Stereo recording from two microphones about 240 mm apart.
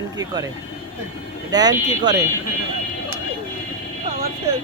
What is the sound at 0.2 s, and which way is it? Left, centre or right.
Speech, centre.